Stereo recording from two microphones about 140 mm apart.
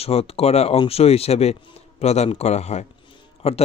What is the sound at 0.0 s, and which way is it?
A man's voice, 45° left (ahead or behind).